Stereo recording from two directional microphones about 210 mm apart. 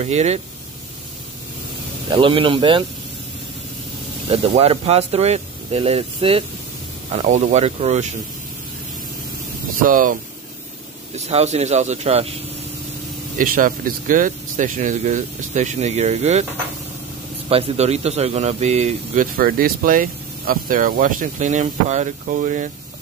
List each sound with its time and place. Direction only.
0.0 s speech: 30° right (ahead or behind)
2.0 s speech: 25° right (ahead or behind)
4.3 s speech: 30° right (ahead or behind)
9.8 s speech: 40° right (ahead or behind)
11.1 s speech: 30° right (ahead or behind)
13.4 s speech: 40° right (ahead or behind)
17.5 s speech: 30° right (ahead or behind)